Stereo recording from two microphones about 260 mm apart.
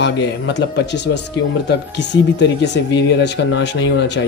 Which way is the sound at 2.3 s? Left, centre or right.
Left.